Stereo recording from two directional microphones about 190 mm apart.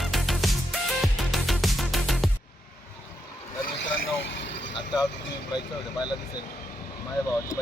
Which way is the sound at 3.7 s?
65° left (ahead or behind).